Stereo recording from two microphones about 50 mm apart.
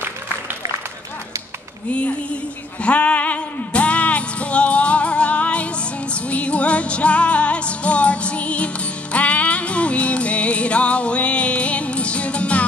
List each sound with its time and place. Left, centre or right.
1.9 s speech: left
2.8 s music: left